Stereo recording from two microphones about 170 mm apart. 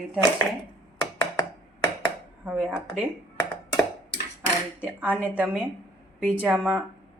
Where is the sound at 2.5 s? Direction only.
5° right (ahead or behind).